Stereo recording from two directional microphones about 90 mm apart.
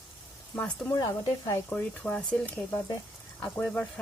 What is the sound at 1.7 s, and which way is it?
Speech, 15° left (ahead or behind).